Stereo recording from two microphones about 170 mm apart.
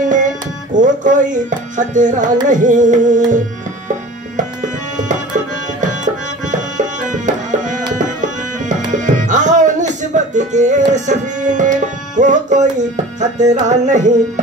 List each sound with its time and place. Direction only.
0.0 s music: 50° right (ahead or behind)
0.7 s tabla: 50° right (ahead or behind)
6.5 s tabla: 45° right (ahead or behind)
8.9 s music: 45° right (ahead or behind)
10.9 s tabla: 45° right (ahead or behind)